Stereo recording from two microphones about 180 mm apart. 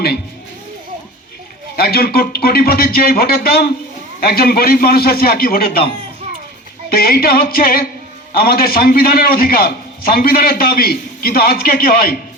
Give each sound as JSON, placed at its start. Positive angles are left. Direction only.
{"t": 1.7, "sound": "a man's voice", "side_deg": 55}
{"t": 6.9, "sound": "a man's voice", "side_deg": 55}